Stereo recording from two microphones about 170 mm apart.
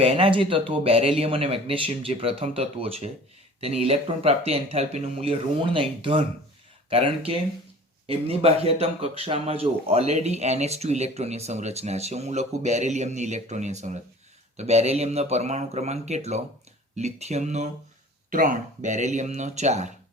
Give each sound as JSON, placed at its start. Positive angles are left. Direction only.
{"t": 0.0, "sound": "speech", "side_deg": -35}
{"t": 18.3, "sound": "speech", "side_deg": -55}